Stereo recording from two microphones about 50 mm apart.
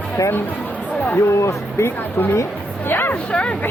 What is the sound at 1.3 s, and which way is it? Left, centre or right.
Speech, left.